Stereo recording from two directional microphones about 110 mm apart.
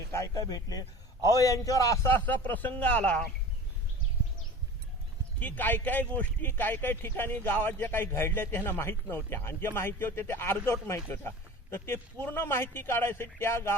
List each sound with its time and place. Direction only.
0.1 s a man's voice: 30° left (ahead or behind); by 3.2 s 10° left (ahead or behind)
5.4 s speech: 15° left (ahead or behind)